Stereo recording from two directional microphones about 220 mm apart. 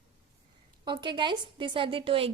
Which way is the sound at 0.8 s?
20° right (ahead or behind).